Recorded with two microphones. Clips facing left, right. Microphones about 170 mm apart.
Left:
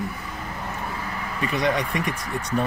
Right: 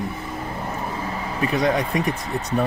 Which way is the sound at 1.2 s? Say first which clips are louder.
Right 4 dB; 25° right (ahead or behind).